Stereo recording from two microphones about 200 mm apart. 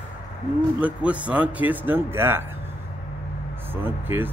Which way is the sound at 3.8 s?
10° right (ahead or behind).